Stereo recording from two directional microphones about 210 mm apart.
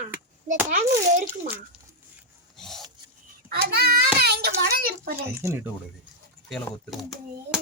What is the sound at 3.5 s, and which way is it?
Child singing, 50° right (ahead or behind).